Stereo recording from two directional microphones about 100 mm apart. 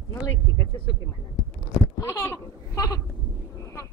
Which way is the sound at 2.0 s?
30° left (ahead or behind).